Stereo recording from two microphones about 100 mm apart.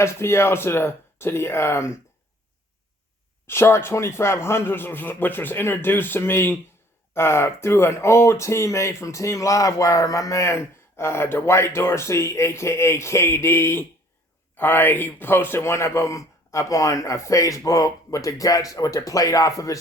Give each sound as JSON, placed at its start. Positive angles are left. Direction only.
{"t": 0.0, "sound": "speech", "side_deg": 25}
{"t": 3.4, "sound": "speech", "side_deg": 25}